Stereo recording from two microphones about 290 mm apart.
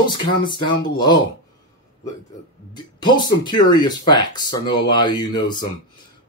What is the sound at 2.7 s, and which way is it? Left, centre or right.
Speech, centre.